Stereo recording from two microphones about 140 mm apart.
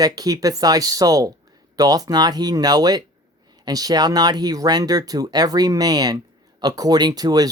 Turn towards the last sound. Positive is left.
turn(degrees=-25)  # may be behind; listen again after turning